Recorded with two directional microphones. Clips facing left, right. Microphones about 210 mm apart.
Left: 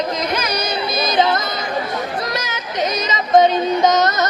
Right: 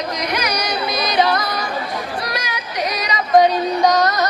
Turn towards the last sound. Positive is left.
turn(degrees=20)  # may be behind; listen again after turning